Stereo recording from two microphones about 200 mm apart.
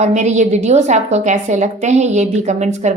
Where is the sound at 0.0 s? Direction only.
35° right (ahead or behind).